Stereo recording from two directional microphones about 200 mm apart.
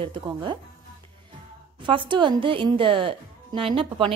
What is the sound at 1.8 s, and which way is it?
Speech, 25° right (ahead or behind).